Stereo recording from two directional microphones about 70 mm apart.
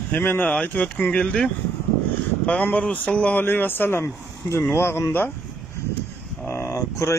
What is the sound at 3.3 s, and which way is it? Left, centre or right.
Speech, left.